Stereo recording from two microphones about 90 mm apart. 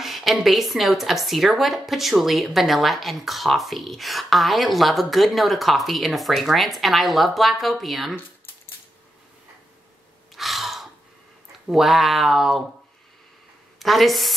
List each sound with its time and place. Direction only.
0.0 s speech: centre (ahead or behind)
10.3 s gasp: centre (ahead or behind)
11.6 s speech: 5° right (ahead or behind)
13.7 s a woman's voice: centre (ahead or behind)